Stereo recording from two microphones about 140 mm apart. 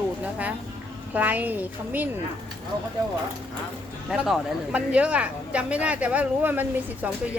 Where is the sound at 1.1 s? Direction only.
10° right (ahead or behind).